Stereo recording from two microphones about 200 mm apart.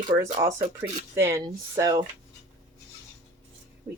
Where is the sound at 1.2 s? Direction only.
15° right (ahead or behind).